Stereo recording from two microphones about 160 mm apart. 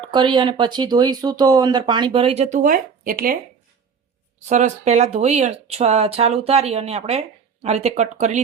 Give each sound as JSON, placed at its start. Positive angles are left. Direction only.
{"t": 0.0, "sound": "speech", "side_deg": -30}
{"t": 4.4, "sound": "speech", "side_deg": -50}